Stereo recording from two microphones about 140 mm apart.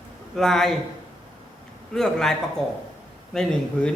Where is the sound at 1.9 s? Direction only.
5° left (ahead or behind).